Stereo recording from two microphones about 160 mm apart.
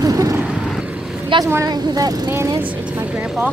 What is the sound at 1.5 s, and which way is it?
Speech, 20° right (ahead or behind).